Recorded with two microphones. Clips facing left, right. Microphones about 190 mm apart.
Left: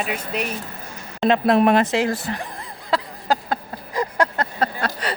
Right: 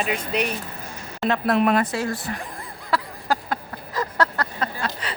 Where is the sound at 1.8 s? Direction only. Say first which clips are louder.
Left 5 dB; 90° left.